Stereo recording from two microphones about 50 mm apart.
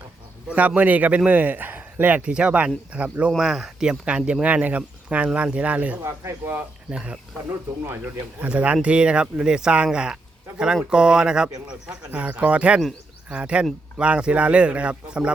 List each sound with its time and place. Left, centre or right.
0.4 s speech: right
3.3 s speech: centre
4.0 s speech: right
8.4 s speech: right
12.1 s speech: right